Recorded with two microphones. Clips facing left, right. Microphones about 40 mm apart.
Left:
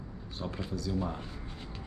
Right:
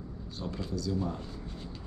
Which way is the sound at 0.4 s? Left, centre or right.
Left.